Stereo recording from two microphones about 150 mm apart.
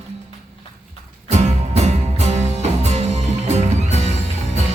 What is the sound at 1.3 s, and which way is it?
Music, 50° right (ahead or behind).